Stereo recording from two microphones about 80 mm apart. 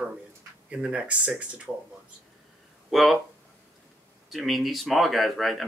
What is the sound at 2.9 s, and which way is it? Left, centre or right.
Speech, centre.